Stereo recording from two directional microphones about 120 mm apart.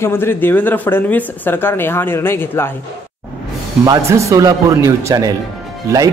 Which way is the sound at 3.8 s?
30° right (ahead or behind).